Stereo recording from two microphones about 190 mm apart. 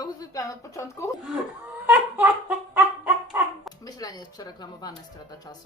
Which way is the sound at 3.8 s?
20° left (ahead or behind).